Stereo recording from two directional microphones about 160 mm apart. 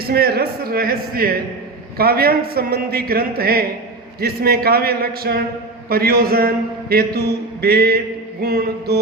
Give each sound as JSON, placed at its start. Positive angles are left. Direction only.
{"t": 0.1, "sound": "a man's voice", "side_deg": -75}